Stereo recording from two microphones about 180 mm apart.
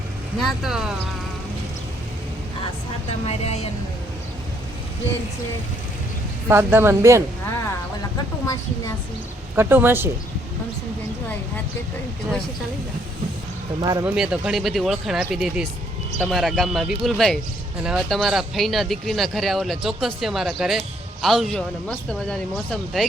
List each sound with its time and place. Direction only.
0.3 s speech: centre (ahead or behind)
3.2 s speech: 35° left (ahead or behind)
6.5 s speech: 10° right (ahead or behind)
9.6 s speech: 10° right (ahead or behind)
14.0 s speech: 5° right (ahead or behind)